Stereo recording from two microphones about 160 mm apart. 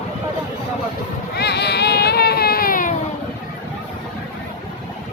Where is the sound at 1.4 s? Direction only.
90° left; by 2.9 s 60° left (ahead or behind).